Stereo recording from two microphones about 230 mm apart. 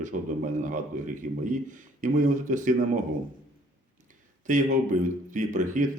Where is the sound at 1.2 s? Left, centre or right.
Right.